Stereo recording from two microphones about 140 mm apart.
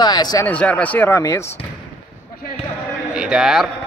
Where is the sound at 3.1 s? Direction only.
5° right (ahead or behind).